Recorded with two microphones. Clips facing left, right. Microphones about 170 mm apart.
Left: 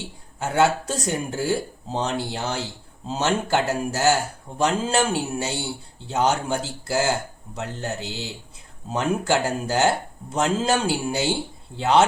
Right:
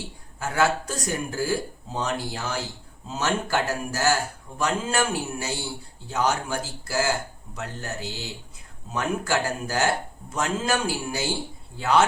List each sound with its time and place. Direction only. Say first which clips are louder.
0.3 s speech: left 3 dB; 25° left (ahead or behind)